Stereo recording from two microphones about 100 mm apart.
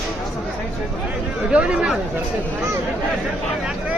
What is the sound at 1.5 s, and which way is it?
Speech, 10° right (ahead or behind).